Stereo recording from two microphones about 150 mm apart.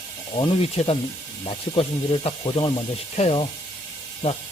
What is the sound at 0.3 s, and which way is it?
Speech, 40° left (ahead or behind).